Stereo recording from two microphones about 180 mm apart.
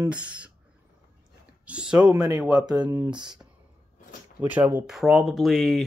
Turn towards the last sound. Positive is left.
turn(degrees=0)  # may be behind; listen again after turning